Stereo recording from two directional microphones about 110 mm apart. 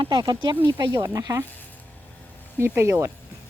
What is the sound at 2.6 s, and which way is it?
Speech, 25° right (ahead or behind).